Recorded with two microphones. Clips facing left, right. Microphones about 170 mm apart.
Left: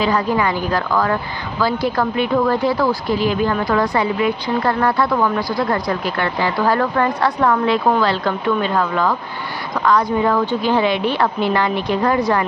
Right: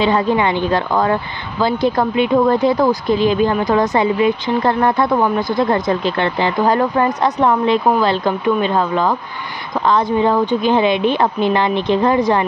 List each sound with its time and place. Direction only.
0.0 s a woman's voice: 25° right (ahead or behind)